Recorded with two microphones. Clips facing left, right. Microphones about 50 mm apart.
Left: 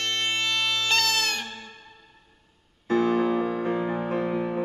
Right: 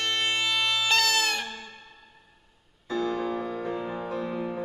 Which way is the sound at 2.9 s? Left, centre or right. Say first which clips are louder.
Left 6 dB; left.